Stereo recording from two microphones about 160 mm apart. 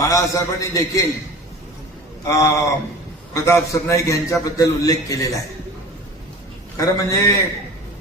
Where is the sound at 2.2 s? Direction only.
20° left (ahead or behind).